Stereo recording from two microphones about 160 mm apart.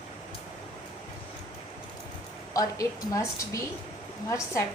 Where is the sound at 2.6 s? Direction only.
20° left (ahead or behind).